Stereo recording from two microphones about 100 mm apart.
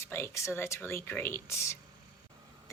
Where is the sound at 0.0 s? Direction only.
25° left (ahead or behind).